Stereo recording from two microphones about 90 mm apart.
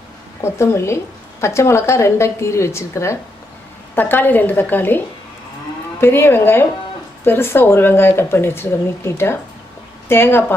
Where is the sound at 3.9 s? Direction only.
20° left (ahead or behind).